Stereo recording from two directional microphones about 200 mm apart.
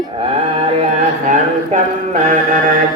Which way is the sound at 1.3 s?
35° right (ahead or behind).